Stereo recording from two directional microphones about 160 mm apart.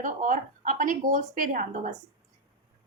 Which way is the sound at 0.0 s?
55° right (ahead or behind).